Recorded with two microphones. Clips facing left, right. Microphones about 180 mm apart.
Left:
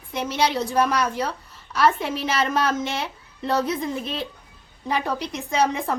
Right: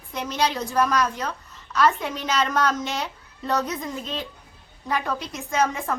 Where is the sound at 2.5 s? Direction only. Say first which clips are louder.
Left 1 dB; 25° left (ahead or behind).